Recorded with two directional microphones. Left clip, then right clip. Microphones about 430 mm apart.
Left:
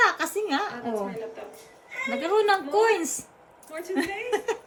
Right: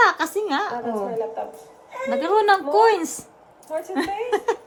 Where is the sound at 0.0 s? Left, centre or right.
Centre.